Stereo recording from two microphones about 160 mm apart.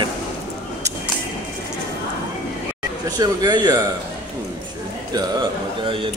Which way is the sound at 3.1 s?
25° right (ahead or behind).